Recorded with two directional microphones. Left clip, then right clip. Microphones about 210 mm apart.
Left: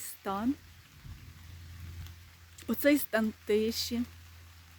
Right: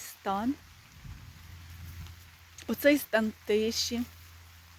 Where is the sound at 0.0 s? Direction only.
10° left (ahead or behind).